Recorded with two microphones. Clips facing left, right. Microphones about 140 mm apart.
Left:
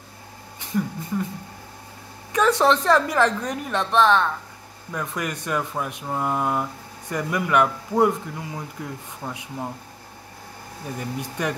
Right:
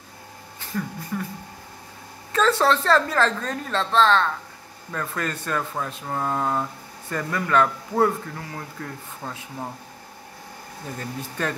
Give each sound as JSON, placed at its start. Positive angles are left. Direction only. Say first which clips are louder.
{"t": 0.6, "sound": "speech", "louder": "left 4 dB", "side_deg": 20}
{"t": 2.3, "sound": "speech", "louder": "left 1 dB", "side_deg": 15}
{"t": 11.0, "sound": "speech", "louder": "left 1 dB", "side_deg": 15}